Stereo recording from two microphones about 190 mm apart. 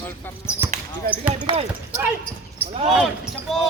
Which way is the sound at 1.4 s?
25° right (ahead or behind).